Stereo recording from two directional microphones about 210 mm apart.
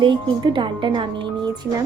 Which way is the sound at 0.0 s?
25° right (ahead or behind).